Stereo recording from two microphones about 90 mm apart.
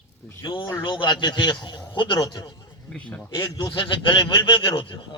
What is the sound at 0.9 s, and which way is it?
A man's voice, 60° left (ahead or behind).